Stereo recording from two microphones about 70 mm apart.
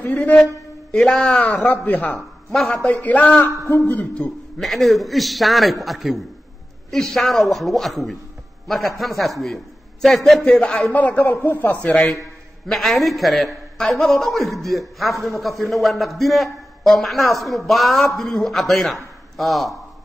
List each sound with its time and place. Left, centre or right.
0.0 s speech: left
0.9 s a man's voice: centre
1.6 s speech: left
2.1 s a man's voice: centre
2.9 s a man's voice: left
4.0 s a man's voice: centre
4.6 s a man's voice: centre
10.4 s speech: centre
12.6 s a man's voice: centre